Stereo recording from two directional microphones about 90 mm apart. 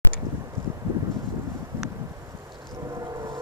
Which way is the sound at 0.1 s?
70° right (ahead or behind).